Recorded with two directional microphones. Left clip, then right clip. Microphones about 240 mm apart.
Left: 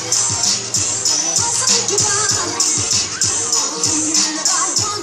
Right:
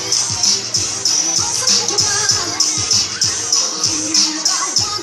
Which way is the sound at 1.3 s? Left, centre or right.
Left.